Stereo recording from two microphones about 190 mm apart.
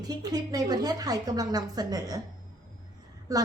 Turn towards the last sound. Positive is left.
turn(degrees=-20)  # may be behind; listen again after turning